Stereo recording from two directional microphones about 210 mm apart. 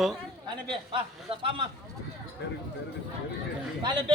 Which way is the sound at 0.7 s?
25° right (ahead or behind).